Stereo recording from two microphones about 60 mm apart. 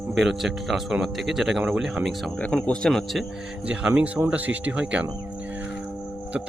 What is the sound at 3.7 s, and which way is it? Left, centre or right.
Speech, centre.